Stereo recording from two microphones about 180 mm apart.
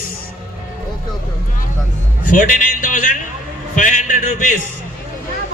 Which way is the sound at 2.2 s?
50° left (ahead or behind).